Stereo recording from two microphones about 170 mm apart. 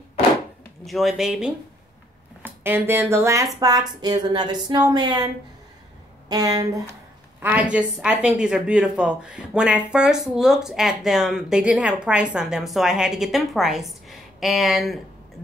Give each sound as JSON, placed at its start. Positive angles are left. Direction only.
{"t": 0.8, "sound": "a woman's voice", "side_deg": 0}
{"t": 7.4, "sound": "a woman's voice", "side_deg": -10}